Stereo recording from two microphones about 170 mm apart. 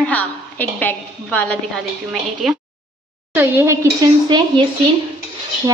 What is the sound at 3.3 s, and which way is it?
Speech, 15° right (ahead or behind).